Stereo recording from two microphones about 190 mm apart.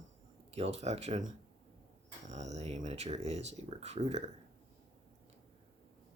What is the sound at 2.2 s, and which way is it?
Speech, 35° right (ahead or behind).